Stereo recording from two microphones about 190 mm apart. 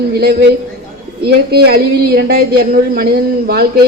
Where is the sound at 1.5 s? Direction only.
55° right (ahead or behind).